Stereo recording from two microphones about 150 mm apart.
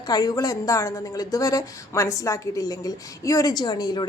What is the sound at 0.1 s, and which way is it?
Speech, 25° left (ahead or behind).